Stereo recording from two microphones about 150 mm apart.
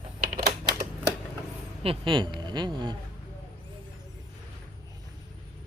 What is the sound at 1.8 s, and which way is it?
A woman's voice, 35° right (ahead or behind).